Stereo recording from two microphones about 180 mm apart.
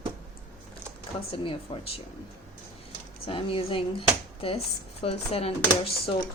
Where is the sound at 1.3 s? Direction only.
30° left (ahead or behind).